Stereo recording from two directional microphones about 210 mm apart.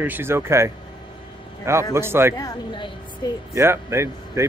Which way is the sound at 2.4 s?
15° left (ahead or behind).